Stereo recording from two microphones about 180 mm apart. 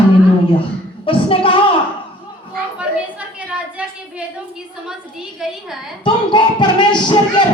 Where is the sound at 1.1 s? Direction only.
30° left (ahead or behind).